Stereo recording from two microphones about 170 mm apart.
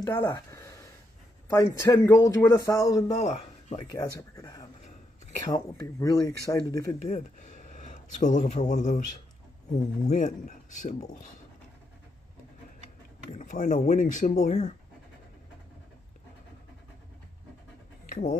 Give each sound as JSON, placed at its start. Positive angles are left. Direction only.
{"t": 0.0, "sound": "speech", "side_deg": 25}
{"t": 3.2, "sound": "a sound", "side_deg": 40}
{"t": 3.7, "sound": "speech", "side_deg": 20}
{"t": 7.1, "sound": "speech", "side_deg": 45}
{"t": 10.0, "sound": "speech", "side_deg": 50}
{"t": 13.3, "sound": "speech", "side_deg": 50}
{"t": 18.1, "sound": "speech", "side_deg": 55}